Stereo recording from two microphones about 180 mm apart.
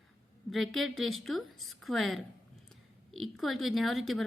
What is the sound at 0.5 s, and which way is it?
A woman's voice, centre (ahead or behind).